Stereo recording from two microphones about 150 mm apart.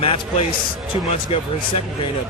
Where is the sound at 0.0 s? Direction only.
40° left (ahead or behind).